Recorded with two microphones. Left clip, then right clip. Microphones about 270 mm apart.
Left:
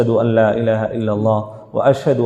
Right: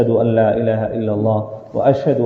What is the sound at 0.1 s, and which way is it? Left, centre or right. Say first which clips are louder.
A man's voice: even; left.